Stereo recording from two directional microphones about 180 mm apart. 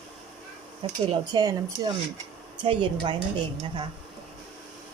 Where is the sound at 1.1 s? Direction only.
25° right (ahead or behind).